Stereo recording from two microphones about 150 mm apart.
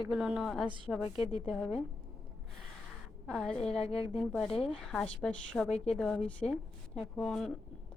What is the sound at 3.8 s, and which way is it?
Speech, 40° left (ahead or behind).